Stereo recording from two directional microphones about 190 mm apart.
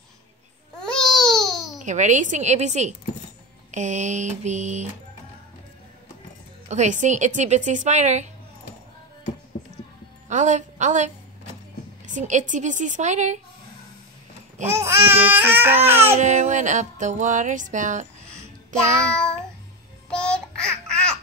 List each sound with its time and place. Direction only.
0.7 s baby cry: 5° left (ahead or behind)
1.8 s speech: 40° right (ahead or behind)
6.7 s speech: 40° right (ahead or behind)
10.2 s a woman's voice: 40° right (ahead or behind)
12.1 s speech: 40° right (ahead or behind)
14.6 s babbling: 15° right (ahead or behind)
16.2 s speech: 40° right (ahead or behind)
20.1 s babbling: 5° left (ahead or behind)